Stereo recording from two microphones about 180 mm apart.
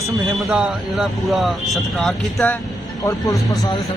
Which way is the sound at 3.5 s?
20° left (ahead or behind).